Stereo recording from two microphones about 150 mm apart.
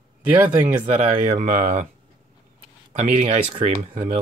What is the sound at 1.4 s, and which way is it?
Speech, 55° right (ahead or behind).